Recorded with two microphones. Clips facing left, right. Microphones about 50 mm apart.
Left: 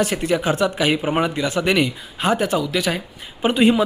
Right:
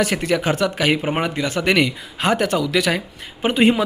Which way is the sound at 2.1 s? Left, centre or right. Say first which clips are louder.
Even; right.